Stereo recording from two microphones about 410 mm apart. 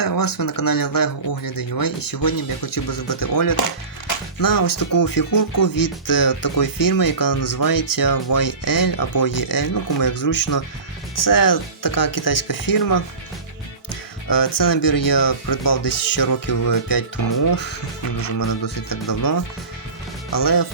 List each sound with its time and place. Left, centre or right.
0.0 s speech: left
13.9 s speech: left
18.2 s speech: left